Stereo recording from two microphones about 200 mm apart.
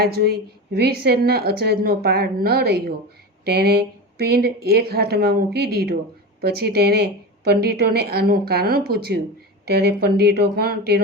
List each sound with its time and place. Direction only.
0.0 s a woman's voice: 50° right (ahead or behind)